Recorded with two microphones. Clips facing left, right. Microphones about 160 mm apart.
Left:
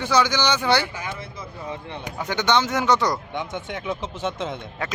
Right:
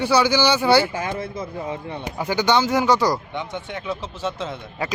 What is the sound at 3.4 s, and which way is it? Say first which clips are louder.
Speech: even; 15° left (ahead or behind).